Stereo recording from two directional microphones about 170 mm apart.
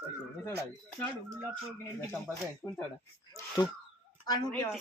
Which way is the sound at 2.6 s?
5° left (ahead or behind).